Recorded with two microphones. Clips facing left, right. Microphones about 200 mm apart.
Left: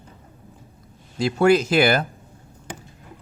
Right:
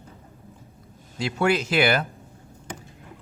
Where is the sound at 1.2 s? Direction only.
40° left (ahead or behind).